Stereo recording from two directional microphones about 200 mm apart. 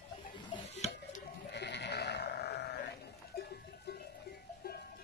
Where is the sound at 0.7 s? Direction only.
35° left (ahead or behind).